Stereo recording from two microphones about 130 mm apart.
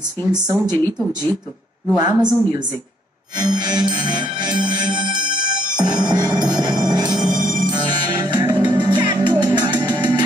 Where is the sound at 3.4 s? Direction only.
35° right (ahead or behind).